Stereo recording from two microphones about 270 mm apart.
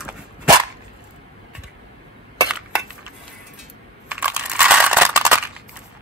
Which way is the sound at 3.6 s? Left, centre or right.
Centre.